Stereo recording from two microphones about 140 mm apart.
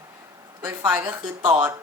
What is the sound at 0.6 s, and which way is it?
A woman's voice, 20° right (ahead or behind).